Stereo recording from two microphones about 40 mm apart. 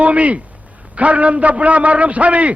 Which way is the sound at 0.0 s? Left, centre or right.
Right.